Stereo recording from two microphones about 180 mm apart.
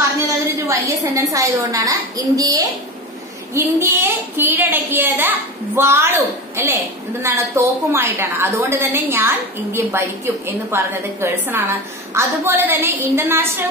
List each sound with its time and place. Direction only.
0.3 s a woman's voice: 15° right (ahead or behind)